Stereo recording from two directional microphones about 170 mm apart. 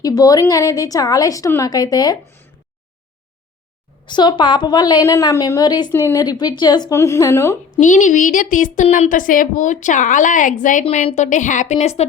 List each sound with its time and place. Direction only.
0.0 s a woman's voice: 20° left (ahead or behind)
4.0 s a woman's voice: 25° left (ahead or behind)
7.7 s speech: 50° left (ahead or behind)